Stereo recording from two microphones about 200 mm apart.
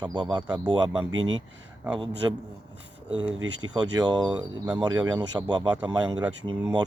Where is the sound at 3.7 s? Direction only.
20° right (ahead or behind).